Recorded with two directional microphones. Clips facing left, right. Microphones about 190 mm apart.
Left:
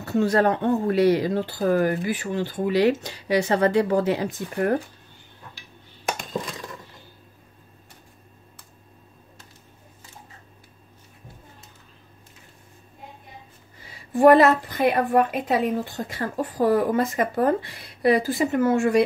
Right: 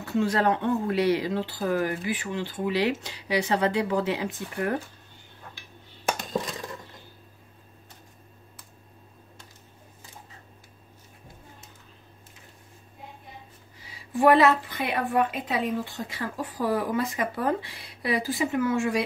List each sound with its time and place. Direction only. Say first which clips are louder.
0.0 s a woman's voice: left 4 dB; 45° left (ahead or behind)
13.8 s a woman's voice: left 5 dB; 50° left (ahead or behind)